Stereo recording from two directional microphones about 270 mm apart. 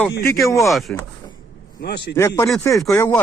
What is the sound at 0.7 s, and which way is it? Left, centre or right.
Speech, centre.